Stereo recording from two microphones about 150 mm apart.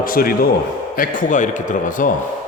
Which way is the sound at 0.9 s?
65° left (ahead or behind).